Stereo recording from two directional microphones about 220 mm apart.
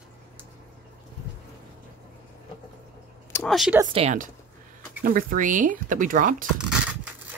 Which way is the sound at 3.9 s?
35° right (ahead or behind).